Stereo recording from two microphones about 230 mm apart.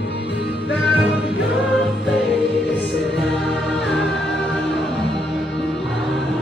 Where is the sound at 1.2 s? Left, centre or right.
Left.